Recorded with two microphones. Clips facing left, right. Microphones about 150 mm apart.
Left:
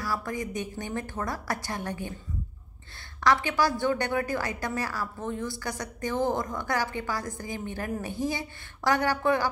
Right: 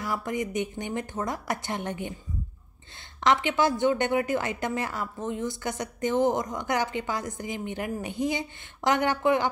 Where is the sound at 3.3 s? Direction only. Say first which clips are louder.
Right 1 dB; 20° right (ahead or behind).